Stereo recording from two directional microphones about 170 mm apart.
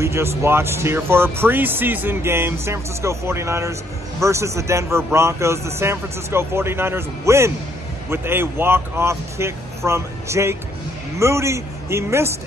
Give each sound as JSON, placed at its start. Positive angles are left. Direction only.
{"t": 0.0, "sound": "speech", "side_deg": -15}